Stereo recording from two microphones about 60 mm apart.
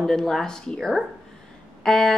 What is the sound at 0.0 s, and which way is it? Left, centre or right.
A woman's voice, centre.